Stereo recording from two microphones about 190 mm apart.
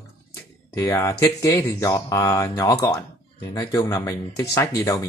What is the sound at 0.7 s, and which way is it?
Speech, 15° left (ahead or behind).